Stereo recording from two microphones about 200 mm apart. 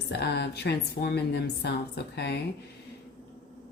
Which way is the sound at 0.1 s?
55° left (ahead or behind).